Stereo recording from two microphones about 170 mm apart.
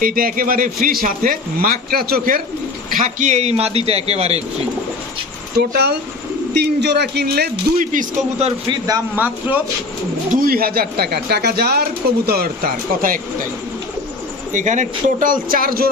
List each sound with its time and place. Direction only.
0.0 s speech: 55° right (ahead or behind)
2.9 s a man's voice: 50° right (ahead or behind)
5.5 s speech: 70° right (ahead or behind)
7.8 s speech: 50° right (ahead or behind)
8.4 s a man's voice: 30° right (ahead or behind)
9.1 s speech: 10° right (ahead or behind)
10.4 s speech: 60° right (ahead or behind)
14.5 s speech: 45° right (ahead or behind); by 15.9 s 60° right (ahead or behind)